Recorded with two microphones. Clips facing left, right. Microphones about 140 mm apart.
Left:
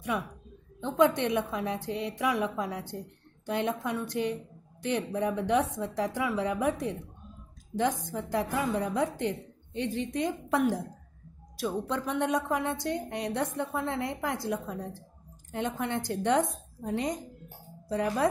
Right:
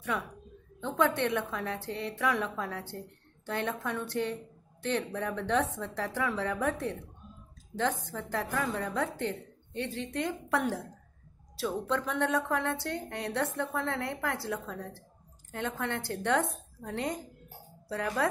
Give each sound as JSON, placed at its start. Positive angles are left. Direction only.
{"t": 0.1, "sound": "a woman's voice", "side_deg": 15}